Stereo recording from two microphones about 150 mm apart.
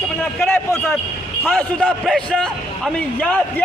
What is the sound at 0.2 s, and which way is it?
A man's voice, 15° left (ahead or behind).